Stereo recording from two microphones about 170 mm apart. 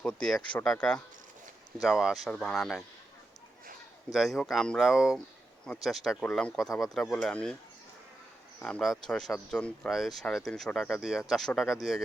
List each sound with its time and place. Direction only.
0.0 s speech: 5° left (ahead or behind)
4.1 s speech: centre (ahead or behind)
8.5 s speech: 5° left (ahead or behind)